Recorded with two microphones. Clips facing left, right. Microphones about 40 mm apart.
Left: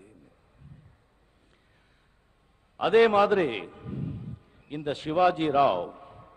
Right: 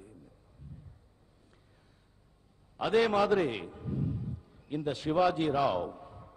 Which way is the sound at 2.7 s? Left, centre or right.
Left.